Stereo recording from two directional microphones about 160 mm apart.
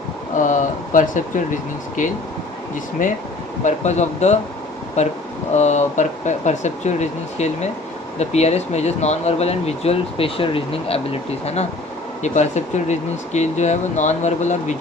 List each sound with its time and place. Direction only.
0.3 s speech: 50° left (ahead or behind)